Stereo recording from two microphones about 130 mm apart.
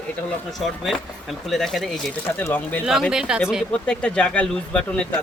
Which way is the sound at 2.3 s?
15° left (ahead or behind).